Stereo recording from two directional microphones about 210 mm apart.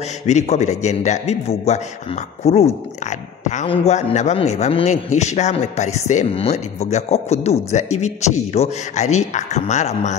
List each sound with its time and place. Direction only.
0.3 s a man's voice: 35° left (ahead or behind)